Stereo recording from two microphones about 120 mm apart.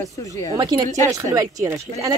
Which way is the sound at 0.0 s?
25° left (ahead or behind).